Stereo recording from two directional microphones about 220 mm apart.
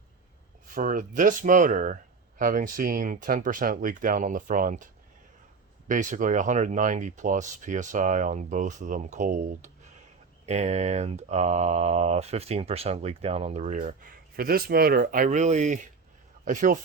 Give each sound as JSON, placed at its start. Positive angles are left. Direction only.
{"t": 0.7, "sound": "speech", "side_deg": -40}
{"t": 5.9, "sound": "speech", "side_deg": -35}